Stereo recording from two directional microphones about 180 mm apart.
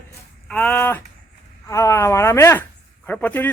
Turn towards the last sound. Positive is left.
turn(degrees=10)  # may be behind; listen again after turning